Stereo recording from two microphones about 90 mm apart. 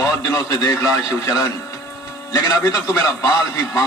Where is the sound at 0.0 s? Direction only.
40° left (ahead or behind).